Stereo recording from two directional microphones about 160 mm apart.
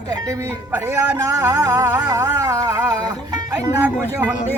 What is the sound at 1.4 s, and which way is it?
Music, 20° right (ahead or behind).